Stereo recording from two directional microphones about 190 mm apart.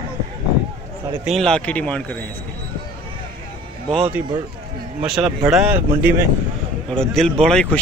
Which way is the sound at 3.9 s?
5° right (ahead or behind).